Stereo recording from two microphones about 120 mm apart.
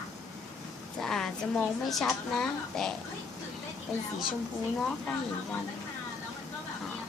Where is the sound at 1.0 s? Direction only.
5° left (ahead or behind).